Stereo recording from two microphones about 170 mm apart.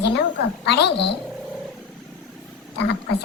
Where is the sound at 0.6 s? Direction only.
75° left (ahead or behind).